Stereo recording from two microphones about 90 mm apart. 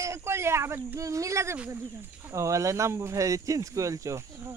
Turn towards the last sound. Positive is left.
turn(degrees=-35)  # may be behind; listen again after turning